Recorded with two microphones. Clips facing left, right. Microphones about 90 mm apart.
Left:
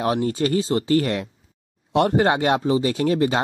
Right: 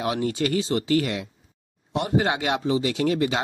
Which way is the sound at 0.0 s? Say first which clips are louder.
Left 3 dB; 40° left (ahead or behind).